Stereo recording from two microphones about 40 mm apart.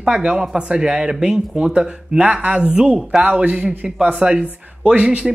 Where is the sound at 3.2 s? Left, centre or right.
Right.